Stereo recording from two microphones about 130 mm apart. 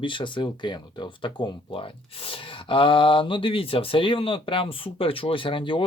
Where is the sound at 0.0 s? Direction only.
40° left (ahead or behind).